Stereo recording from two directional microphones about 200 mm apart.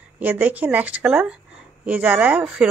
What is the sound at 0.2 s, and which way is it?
Speech, 10° right (ahead or behind).